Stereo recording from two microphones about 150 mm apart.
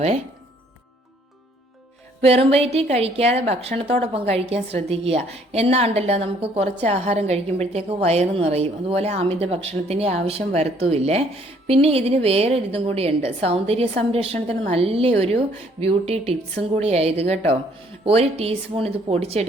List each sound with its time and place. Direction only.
2.2 s a woman's voice: 45° right (ahead or behind)